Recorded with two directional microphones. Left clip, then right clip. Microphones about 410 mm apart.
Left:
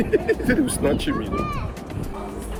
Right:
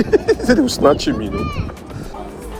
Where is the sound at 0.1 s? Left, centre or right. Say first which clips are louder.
Right 7 dB; right.